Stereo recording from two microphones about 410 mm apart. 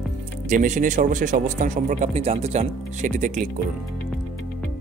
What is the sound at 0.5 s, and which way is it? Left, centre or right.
Speech, centre.